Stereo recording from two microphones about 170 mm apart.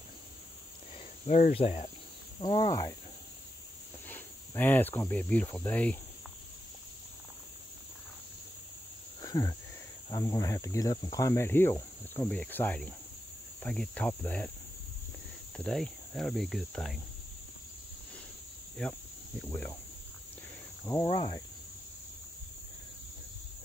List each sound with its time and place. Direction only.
1.2 s speech: 45° left (ahead or behind)
2.4 s speech: 25° left (ahead or behind)
4.1 s speech: 10° left (ahead or behind)
9.2 s a sound: 20° left (ahead or behind)
10.0 s speech: 20° left (ahead or behind)
15.5 s cricket: 5° left (ahead or behind)
18.8 s speech: 5° left (ahead or behind)
21.0 s speech: 30° left (ahead or behind)